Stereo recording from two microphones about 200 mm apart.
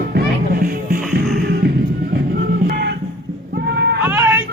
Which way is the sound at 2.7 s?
55° right (ahead or behind).